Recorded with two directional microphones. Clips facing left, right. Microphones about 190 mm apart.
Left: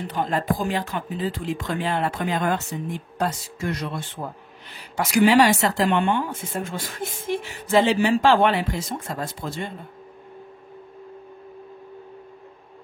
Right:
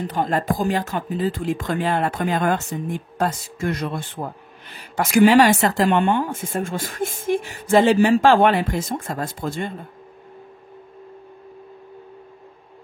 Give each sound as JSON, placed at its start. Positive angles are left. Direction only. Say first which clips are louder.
{"t": 0.1, "sound": "speech", "louder": "right 1 dB", "side_deg": -45}